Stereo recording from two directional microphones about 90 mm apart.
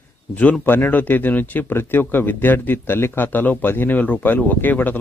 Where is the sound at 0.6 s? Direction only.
20° left (ahead or behind).